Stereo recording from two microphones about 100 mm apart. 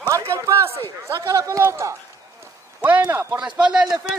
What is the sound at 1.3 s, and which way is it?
Speech, 35° right (ahead or behind).